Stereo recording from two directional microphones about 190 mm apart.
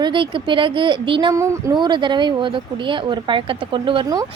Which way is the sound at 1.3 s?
15° right (ahead or behind).